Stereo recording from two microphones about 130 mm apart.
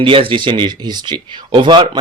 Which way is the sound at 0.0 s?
45° right (ahead or behind).